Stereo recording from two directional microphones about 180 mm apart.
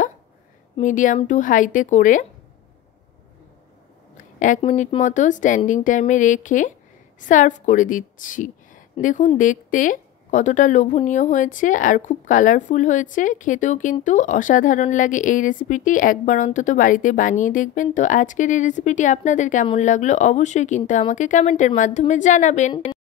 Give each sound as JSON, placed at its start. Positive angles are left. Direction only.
{"t": 0.7, "sound": "a woman's voice", "side_deg": 45}
{"t": 4.6, "sound": "a woman's voice", "side_deg": 30}